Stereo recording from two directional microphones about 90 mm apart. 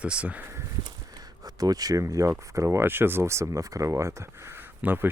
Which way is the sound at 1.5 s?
45° right (ahead or behind).